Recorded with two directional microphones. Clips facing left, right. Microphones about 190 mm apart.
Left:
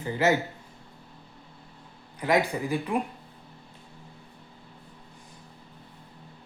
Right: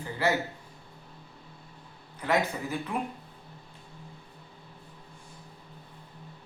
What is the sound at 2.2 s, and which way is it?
Speech, 15° left (ahead or behind).